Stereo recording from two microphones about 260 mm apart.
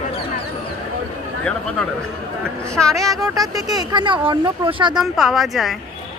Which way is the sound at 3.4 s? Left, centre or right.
Centre.